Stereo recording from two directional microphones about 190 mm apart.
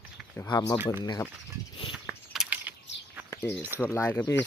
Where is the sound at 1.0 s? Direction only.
20° left (ahead or behind).